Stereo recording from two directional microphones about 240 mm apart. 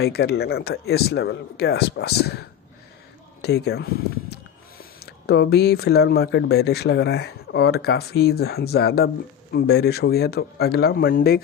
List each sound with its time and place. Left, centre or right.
0.0 s speech: left
3.4 s speech: left